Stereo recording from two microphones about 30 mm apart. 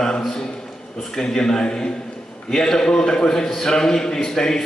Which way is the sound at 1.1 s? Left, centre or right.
Centre.